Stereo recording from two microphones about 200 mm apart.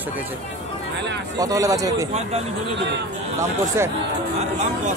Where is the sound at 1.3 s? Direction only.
15° right (ahead or behind).